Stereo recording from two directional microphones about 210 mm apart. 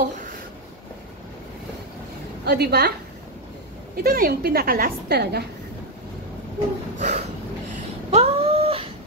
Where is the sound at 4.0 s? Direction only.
45° right (ahead or behind).